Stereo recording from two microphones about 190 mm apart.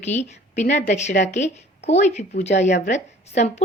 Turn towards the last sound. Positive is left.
turn(degrees=35)  # may be behind; listen again after turning